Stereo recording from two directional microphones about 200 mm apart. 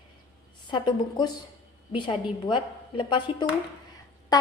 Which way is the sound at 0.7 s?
20° left (ahead or behind).